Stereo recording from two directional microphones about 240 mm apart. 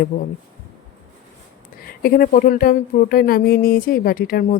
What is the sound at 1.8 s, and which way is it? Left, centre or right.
Speech, left.